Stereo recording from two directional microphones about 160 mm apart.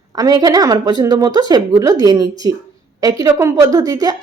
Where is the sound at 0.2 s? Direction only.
25° right (ahead or behind).